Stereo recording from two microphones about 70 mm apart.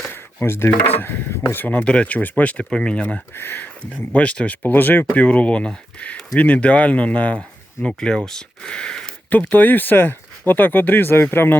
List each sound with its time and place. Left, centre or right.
0.1 s speech: left
1.6 s speech: centre
3.3 s speech: left
4.1 s speech: centre
5.1 s speech: centre
9.5 s speech: left